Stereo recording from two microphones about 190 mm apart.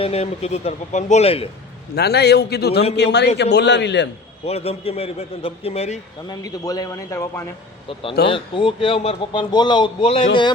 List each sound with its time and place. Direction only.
0.0 s a man's voice: 35° left (ahead or behind)
2.0 s a man's voice: 60° left (ahead or behind)
4.4 s a man's voice: 30° left (ahead or behind)
6.2 s a man's voice: 20° left (ahead or behind)
8.3 s a man's voice: 30° left (ahead or behind)